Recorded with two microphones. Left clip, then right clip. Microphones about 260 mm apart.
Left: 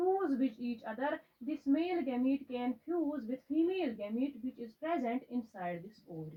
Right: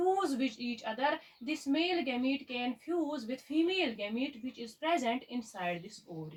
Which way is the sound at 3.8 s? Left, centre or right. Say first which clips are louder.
Right 2 dB; right.